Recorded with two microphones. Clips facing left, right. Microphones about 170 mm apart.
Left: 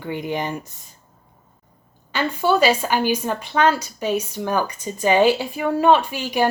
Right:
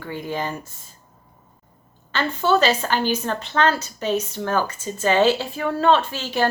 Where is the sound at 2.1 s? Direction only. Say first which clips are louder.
Left 1 dB; 10° left (ahead or behind).